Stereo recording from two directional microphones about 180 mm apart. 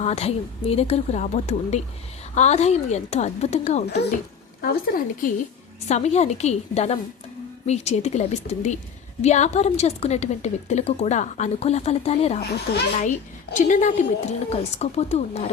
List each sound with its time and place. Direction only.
0.0 s a woman's voice: 35° left (ahead or behind)
4.6 s speech: 50° left (ahead or behind)
5.9 s a woman's voice: 40° left (ahead or behind)
12.4 s speech: 65° left (ahead or behind)
13.0 s a woman's voice: 45° left (ahead or behind)